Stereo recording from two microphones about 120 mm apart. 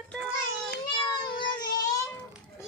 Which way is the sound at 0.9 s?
40° left (ahead or behind).